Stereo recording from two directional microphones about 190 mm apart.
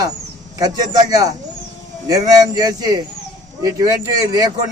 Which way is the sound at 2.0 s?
20° right (ahead or behind).